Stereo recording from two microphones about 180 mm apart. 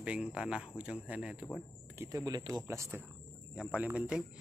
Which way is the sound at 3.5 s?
5° right (ahead or behind).